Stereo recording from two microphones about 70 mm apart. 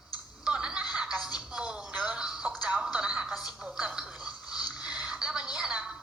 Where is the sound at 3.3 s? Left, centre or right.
Centre.